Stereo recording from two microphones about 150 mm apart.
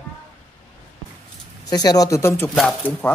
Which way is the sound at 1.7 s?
25° left (ahead or behind).